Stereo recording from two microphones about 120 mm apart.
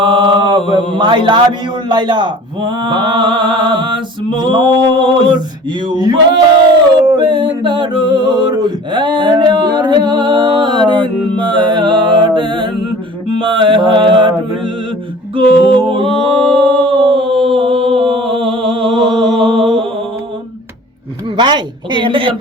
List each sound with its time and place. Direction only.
0.0 s mantra: 45° right (ahead or behind)
7.3 s mantra: 40° right (ahead or behind)
15.4 s music: 45° right (ahead or behind)
21.3 s mantra: 40° right (ahead or behind)